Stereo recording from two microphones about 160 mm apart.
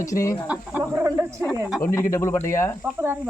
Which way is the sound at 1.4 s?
Centre (ahead or behind).